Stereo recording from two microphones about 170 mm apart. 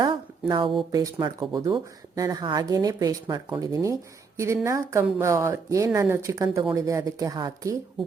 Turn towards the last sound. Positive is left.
turn(degrees=-20)  # may be behind; listen again after turning